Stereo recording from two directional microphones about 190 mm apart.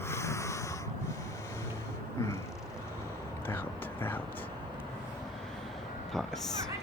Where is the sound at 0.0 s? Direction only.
15° left (ahead or behind).